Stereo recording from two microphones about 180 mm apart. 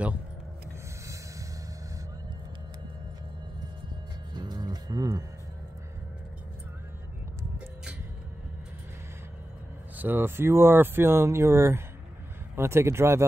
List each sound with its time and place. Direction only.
4.3 s music: 25° right (ahead or behind)
9.9 s speech: 10° right (ahead or behind)